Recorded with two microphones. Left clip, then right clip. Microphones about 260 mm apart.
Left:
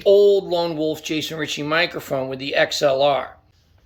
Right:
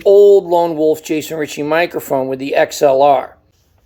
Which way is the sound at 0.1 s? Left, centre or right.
Centre.